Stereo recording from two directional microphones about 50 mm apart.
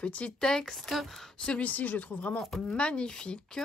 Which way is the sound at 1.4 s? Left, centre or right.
Left.